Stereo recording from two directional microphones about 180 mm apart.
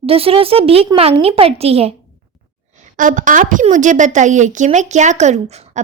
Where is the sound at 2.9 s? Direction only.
45° right (ahead or behind).